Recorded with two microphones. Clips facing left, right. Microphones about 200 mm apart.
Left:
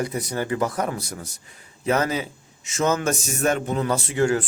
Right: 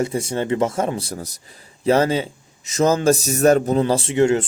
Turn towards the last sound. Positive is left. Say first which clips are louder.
# right 4 dB
turn(degrees=-25)  # may be behind; listen again after turning